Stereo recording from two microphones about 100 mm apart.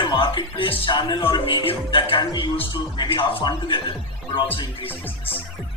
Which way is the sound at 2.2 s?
45° left (ahead or behind).